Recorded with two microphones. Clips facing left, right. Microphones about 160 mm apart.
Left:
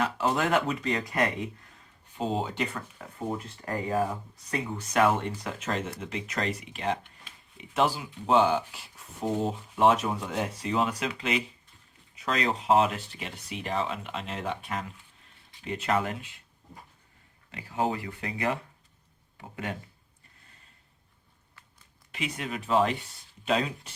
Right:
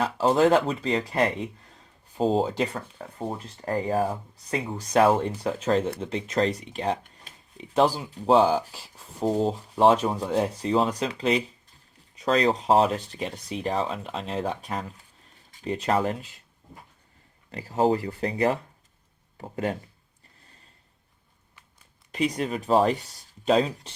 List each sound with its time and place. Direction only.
0.0 s speech: 30° right (ahead or behind)
17.5 s speech: 40° right (ahead or behind)
22.1 s speech: 35° right (ahead or behind)